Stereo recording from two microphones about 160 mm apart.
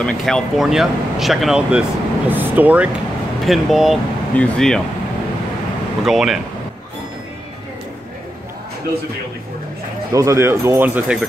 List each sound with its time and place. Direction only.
0.0 s speech: centre (ahead or behind)
6.0 s speech: centre (ahead or behind)
10.1 s speech: 20° right (ahead or behind)